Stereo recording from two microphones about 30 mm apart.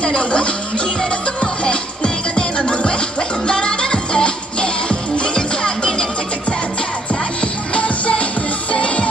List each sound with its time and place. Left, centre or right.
0.0 s speech: left
1.4 s music: left
7.7 s music: left